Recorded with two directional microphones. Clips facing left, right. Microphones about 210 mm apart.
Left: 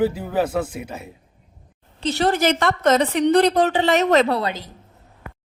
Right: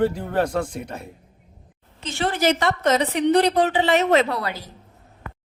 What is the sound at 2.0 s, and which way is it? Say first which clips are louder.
A woman's voice: left 4 dB; 40° left (ahead or behind).